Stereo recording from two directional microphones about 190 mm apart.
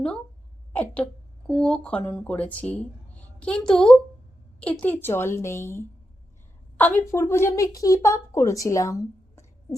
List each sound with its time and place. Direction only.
0.7 s a woman's voice: 10° left (ahead or behind)